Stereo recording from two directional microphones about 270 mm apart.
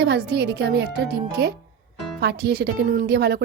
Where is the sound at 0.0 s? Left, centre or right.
Right.